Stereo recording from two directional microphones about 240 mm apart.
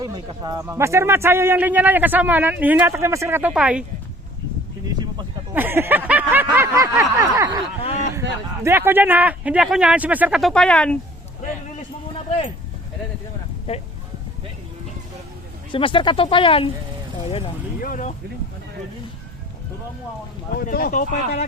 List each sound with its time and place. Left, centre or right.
0.0 s a man's voice: centre
4.9 s a man's voice: centre
7.8 s speech: left
8.6 s speech: centre
15.7 s speech: left
17.7 s vehicle: left
20.6 s speech: left